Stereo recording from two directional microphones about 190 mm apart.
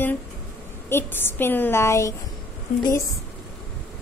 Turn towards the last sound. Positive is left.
turn(degrees=20)  # may be behind; listen again after turning